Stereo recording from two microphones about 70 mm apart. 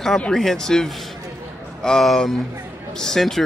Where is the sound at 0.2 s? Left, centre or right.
Centre.